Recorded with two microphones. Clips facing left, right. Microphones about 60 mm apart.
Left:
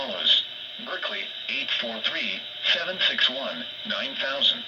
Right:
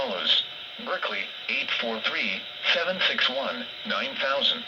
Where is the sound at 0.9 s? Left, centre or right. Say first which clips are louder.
Right 3 dB; right.